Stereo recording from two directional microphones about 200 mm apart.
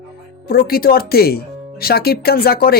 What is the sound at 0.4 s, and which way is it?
A man's voice, 50° left (ahead or behind).